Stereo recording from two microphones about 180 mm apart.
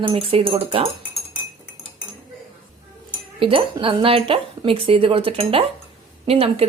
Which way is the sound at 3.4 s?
30° right (ahead or behind).